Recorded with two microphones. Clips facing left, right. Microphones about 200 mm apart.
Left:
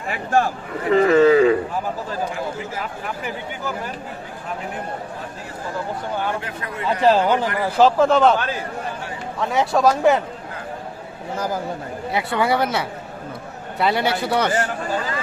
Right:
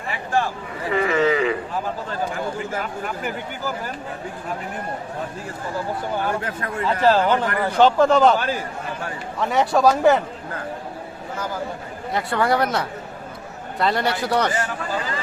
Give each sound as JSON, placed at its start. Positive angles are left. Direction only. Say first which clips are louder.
{"t": 0.9, "sound": "speech", "louder": "left 6 dB", "side_deg": 40}
{"t": 6.4, "sound": "a man's voice", "louder": "right 3 dB", "side_deg": -45}
{"t": 6.8, "sound": "a man's voice", "louder": "left 1 dB", "side_deg": 10}
{"t": 12.1, "sound": "a man's voice", "louder": "even", "side_deg": 5}